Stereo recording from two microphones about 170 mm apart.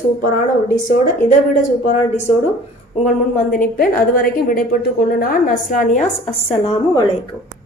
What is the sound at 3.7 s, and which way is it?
A woman's voice, 60° left (ahead or behind).